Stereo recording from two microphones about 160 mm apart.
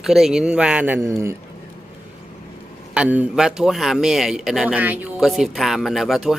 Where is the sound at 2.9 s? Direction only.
10° right (ahead or behind).